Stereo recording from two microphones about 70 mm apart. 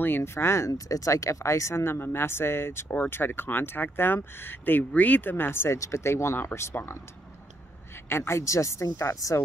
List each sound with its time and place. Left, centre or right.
0.0 s speech: left
8.1 s speech: left